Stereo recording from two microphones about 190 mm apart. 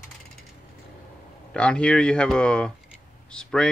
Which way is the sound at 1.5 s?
5° left (ahead or behind).